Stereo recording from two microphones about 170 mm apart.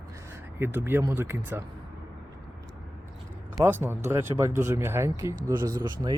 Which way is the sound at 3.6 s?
15° right (ahead or behind).